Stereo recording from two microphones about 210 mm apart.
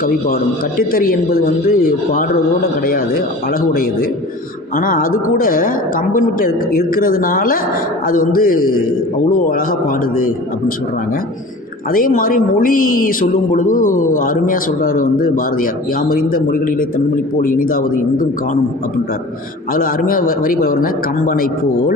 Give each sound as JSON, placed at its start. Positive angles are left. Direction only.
{"t": 0.8, "sound": "a man's voice", "side_deg": 45}
{"t": 3.5, "sound": "a man's voice", "side_deg": 45}
{"t": 11.9, "sound": "speech", "side_deg": 40}
{"t": 19.7, "sound": "a man's voice", "side_deg": 40}